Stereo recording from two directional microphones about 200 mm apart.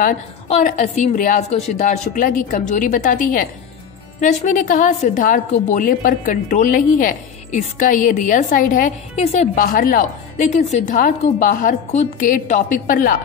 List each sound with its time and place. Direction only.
0.0 s a woman's voice: 40° left (ahead or behind)